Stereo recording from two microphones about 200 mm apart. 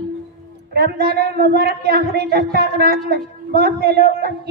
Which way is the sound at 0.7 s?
50° right (ahead or behind).